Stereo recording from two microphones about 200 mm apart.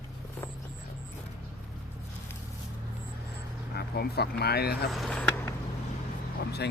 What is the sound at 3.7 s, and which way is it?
Speech, 50° left (ahead or behind).